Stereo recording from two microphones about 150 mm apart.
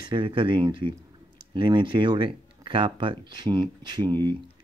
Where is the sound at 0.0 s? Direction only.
30° right (ahead or behind).